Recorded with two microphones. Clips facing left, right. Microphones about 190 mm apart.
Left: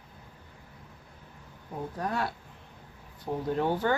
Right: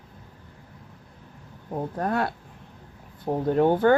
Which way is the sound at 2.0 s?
55° right (ahead or behind).